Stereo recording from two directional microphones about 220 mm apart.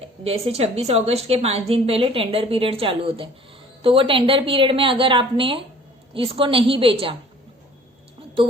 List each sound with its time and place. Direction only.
0.3 s a woman's voice: 25° right (ahead or behind)